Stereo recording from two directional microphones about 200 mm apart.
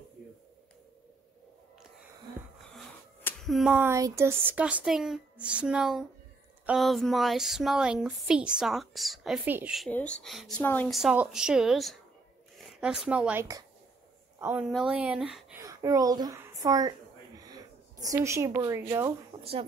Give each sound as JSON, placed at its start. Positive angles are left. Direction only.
{"t": 2.7, "sound": "speech", "side_deg": 0}
{"t": 9.8, "sound": "a woman's voice", "side_deg": 5}
{"t": 15.6, "sound": "speech", "side_deg": -15}